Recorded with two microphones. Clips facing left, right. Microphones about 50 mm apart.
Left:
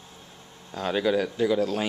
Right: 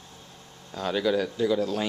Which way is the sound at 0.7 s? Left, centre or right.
Centre.